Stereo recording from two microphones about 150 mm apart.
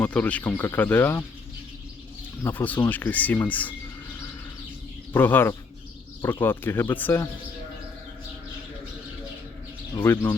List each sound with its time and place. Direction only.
0.0 s speech: 10° left (ahead or behind)
2.4 s speech: 15° left (ahead or behind)
5.1 s speech: 15° left (ahead or behind)
10.0 s speech: 20° left (ahead or behind)